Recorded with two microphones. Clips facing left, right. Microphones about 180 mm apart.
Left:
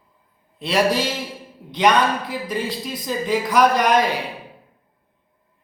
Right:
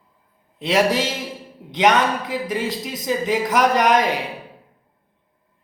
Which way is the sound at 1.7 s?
20° right (ahead or behind).